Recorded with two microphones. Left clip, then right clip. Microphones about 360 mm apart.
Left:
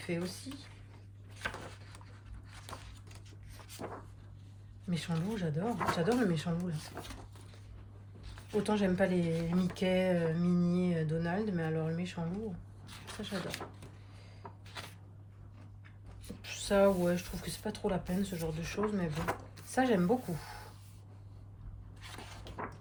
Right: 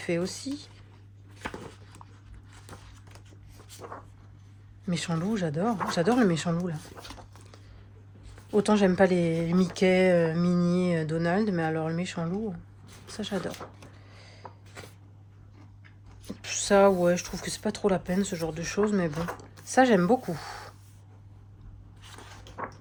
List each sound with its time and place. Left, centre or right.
0.0 s speech: centre
4.9 s speech: centre
8.6 s speech: centre
14.4 s a sound: centre
16.4 s speech: centre
22.0 s a sound: centre